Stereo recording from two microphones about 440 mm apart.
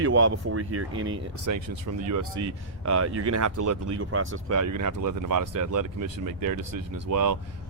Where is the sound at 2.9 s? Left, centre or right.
Right.